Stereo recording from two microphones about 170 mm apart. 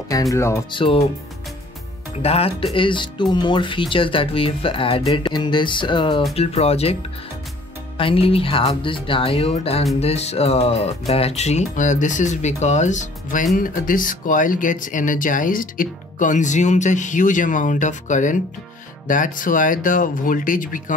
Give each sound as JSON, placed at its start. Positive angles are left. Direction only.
{"t": 0.1, "sound": "speech", "side_deg": 20}
{"t": 0.7, "sound": "speech", "side_deg": 30}
{"t": 2.2, "sound": "speech", "side_deg": 35}
{"t": 8.0, "sound": "speech", "side_deg": 35}